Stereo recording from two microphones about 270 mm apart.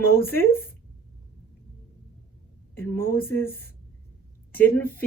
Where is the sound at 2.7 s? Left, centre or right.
Centre.